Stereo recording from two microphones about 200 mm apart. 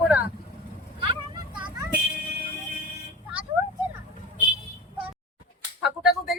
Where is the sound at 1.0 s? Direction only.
25° right (ahead or behind).